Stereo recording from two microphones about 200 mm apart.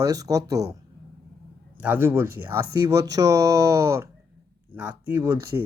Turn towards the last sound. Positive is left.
turn(degrees=-10)  # may be behind; listen again after turning